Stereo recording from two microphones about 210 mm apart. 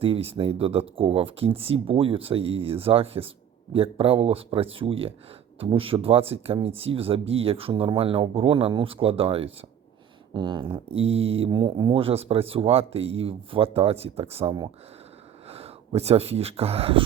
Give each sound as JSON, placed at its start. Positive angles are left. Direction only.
{"t": 0.0, "sound": "speech", "side_deg": -25}